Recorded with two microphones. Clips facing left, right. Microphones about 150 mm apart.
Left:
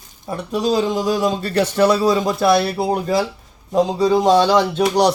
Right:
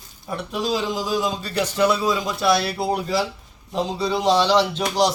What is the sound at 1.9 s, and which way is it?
Speech, 40° left (ahead or behind).